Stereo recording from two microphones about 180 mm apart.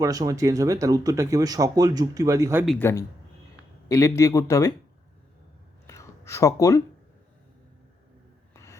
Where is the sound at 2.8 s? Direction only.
15° left (ahead or behind).